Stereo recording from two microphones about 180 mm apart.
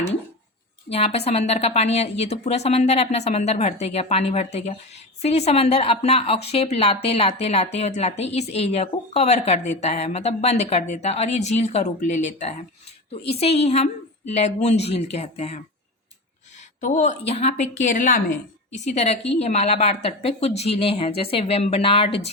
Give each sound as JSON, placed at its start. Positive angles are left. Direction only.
{"t": 0.9, "sound": "a woman's voice", "side_deg": 35}
{"t": 16.8, "sound": "a woman's voice", "side_deg": 40}
{"t": 18.7, "sound": "a woman's voice", "side_deg": 35}